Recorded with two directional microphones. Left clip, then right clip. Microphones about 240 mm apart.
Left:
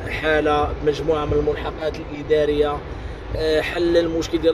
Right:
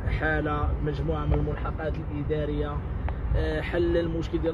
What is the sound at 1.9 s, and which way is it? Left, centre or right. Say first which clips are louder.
Speech: left 11 dB; left.